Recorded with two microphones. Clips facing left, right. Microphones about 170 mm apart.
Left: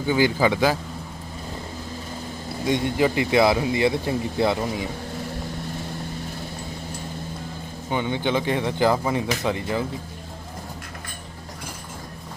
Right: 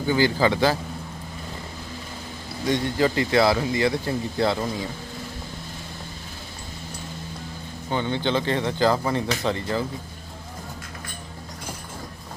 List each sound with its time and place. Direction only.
0.1 s speech: 15° left (ahead or behind)
2.6 s speech: 20° left (ahead or behind)
7.9 s speech: 15° left (ahead or behind)